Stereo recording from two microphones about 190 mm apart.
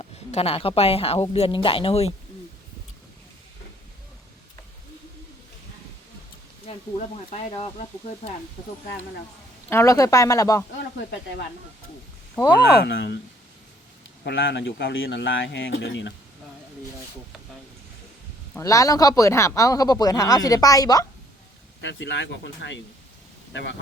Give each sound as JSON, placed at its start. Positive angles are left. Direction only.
{"t": 0.0, "sound": "speech", "side_deg": 30}
{"t": 7.3, "sound": "speech", "side_deg": 30}
{"t": 9.6, "sound": "a man's voice", "side_deg": 15}
{"t": 12.7, "sound": "speech", "side_deg": 65}
{"t": 14.3, "sound": "speech", "side_deg": 75}
{"t": 18.5, "sound": "a man's voice", "side_deg": 15}
{"t": 21.8, "sound": "speech", "side_deg": 70}